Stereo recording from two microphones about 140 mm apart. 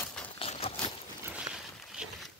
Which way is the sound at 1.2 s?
5° right (ahead or behind).